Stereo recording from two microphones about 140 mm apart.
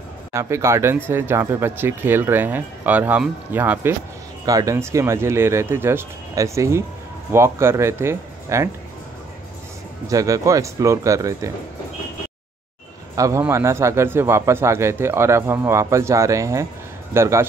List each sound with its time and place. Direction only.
0.3 s speech: 20° right (ahead or behind)
4.5 s speech: 25° right (ahead or behind)
10.0 s speech: 25° right (ahead or behind)
13.1 s speech: 25° right (ahead or behind)